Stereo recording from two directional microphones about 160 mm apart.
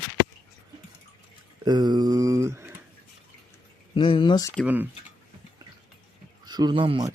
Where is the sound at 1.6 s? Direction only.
25° right (ahead or behind).